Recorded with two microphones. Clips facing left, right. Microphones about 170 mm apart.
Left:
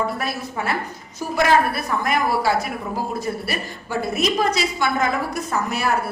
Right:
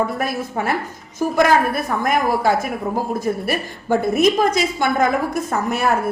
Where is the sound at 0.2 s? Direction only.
50° right (ahead or behind).